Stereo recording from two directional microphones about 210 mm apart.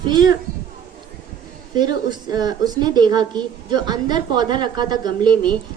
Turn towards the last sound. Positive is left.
turn(degrees=-20)  # may be behind; listen again after turning